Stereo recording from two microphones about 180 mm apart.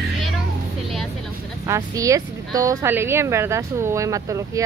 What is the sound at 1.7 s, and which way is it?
Speech, 15° right (ahead or behind).